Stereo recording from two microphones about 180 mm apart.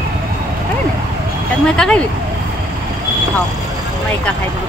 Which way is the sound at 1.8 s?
5° left (ahead or behind).